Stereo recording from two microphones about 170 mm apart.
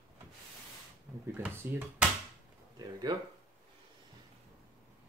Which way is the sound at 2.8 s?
25° right (ahead or behind).